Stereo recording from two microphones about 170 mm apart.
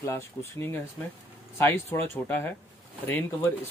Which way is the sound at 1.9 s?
15° left (ahead or behind).